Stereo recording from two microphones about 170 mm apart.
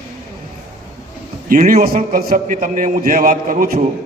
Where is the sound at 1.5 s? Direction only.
55° right (ahead or behind).